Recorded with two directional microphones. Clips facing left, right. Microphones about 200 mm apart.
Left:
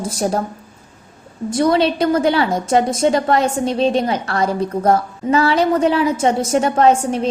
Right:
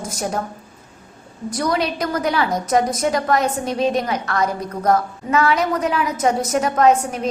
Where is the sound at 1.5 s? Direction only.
25° left (ahead or behind).